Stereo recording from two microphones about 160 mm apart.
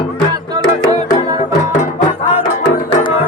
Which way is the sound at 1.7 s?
50° left (ahead or behind).